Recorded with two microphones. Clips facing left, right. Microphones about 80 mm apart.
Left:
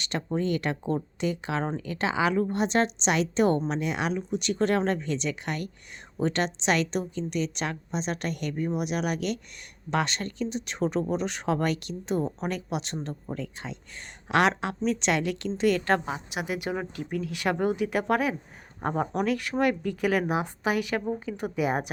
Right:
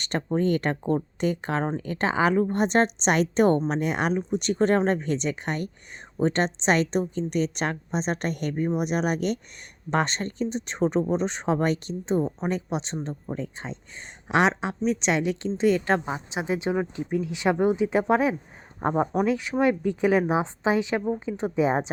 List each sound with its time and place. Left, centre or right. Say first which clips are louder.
0.3 s a woman's voice: right 4 dB; right